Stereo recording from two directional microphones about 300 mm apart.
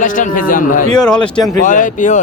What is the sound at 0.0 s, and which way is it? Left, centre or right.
Speech, left.